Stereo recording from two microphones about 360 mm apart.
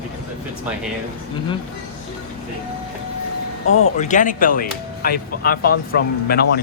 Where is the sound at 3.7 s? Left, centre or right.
Left.